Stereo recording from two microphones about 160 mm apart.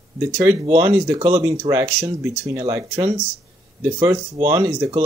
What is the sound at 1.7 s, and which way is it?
Speech, 20° right (ahead or behind).